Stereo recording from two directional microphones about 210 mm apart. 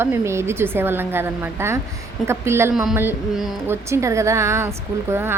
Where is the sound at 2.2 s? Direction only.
10° right (ahead or behind).